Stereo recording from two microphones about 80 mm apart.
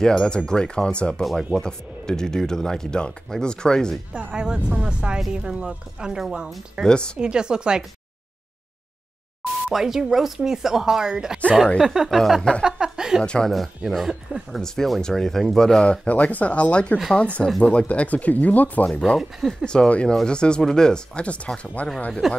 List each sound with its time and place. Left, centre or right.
0.0 s speech: centre
4.1 s speech: centre
7.2 s speech: centre
9.7 s speech: centre
12.6 s a sound: centre
13.2 s speech: centre
18.9 s speech: centre
22.2 s speech: centre